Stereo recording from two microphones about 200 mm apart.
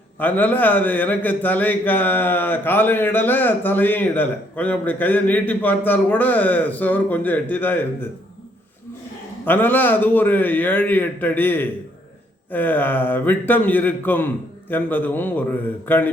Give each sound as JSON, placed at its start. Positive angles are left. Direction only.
{"t": 0.2, "sound": "a man's voice", "side_deg": 10}
{"t": 9.4, "sound": "a man's voice", "side_deg": 10}